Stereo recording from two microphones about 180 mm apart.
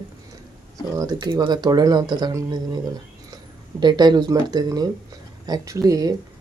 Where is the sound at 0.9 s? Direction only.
20° right (ahead or behind).